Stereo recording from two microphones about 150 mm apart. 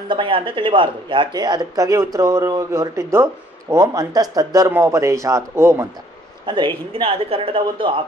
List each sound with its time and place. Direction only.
0.1 s speech: 35° right (ahead or behind); by 5.9 s 15° right (ahead or behind)
6.4 s speech: 30° right (ahead or behind)